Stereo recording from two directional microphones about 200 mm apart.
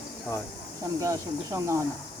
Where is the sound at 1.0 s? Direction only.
15° right (ahead or behind).